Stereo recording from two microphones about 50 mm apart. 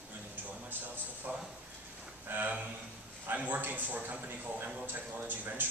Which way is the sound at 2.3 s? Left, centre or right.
Right.